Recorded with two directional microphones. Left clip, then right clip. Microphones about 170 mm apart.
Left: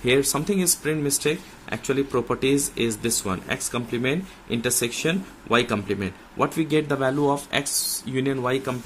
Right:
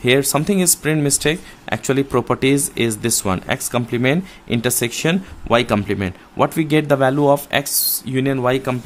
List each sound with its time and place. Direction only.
0.0 s speech: 40° right (ahead or behind)